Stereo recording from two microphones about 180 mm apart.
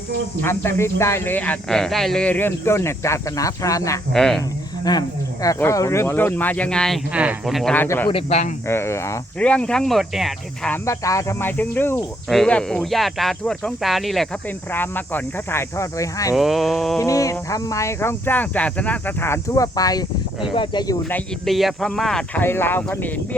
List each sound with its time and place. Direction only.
0.4 s speech: 15° left (ahead or behind)
4.1 s speech: centre (ahead or behind)
4.9 s speech: 20° left (ahead or behind)
8.1 s speech: 40° left (ahead or behind)
8.6 s speech: 15° left (ahead or behind)
10.8 s speech: 15° left (ahead or behind); by 14.3 s centre (ahead or behind)
14.7 s speech: 10° left (ahead or behind)
16.3 s speech: centre (ahead or behind)
17.0 s speech: 20° left (ahead or behind)
21.1 s speech: centre (ahead or behind)